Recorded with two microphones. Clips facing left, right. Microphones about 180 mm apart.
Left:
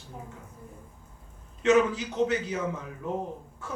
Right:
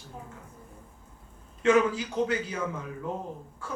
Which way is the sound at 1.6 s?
20° left (ahead or behind).